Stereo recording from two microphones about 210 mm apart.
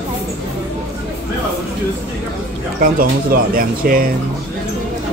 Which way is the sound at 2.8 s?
45° right (ahead or behind).